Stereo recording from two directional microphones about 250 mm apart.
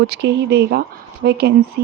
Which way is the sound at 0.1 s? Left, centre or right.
Right.